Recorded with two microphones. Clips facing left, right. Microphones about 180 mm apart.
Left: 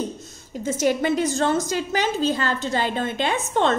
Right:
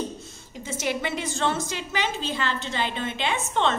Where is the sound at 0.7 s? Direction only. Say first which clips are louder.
Left 8 dB; 40° left (ahead or behind).